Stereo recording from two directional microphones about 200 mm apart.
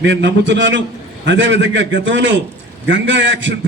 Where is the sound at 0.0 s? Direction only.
65° right (ahead or behind).